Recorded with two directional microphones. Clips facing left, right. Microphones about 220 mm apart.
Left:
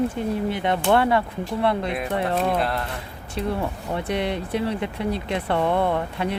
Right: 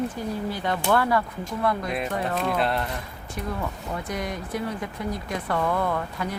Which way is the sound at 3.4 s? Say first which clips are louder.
Left 5 dB; 30° left (ahead or behind).